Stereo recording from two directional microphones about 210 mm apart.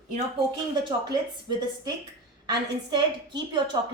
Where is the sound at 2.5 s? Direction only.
20° right (ahead or behind).